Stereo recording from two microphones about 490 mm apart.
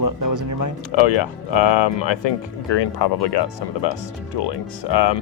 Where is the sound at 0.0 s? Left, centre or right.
Right.